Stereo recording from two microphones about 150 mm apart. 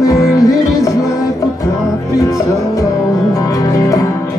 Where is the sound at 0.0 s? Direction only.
20° left (ahead or behind).